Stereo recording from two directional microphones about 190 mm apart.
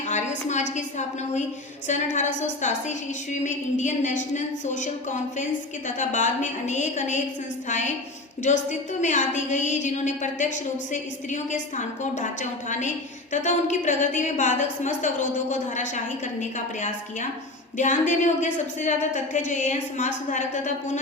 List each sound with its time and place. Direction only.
0.0 s a woman's voice: 40° left (ahead or behind)
8.4 s a woman's voice: 40° left (ahead or behind)